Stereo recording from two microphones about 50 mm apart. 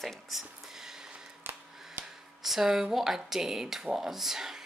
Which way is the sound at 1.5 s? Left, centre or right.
Right.